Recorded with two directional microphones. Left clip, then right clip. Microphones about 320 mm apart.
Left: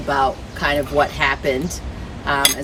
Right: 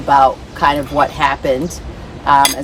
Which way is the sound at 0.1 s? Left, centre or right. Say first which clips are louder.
Right 8 dB; centre.